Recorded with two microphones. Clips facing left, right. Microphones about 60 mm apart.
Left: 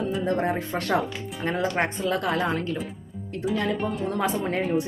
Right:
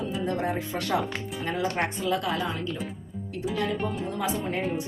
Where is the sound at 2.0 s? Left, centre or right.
Left.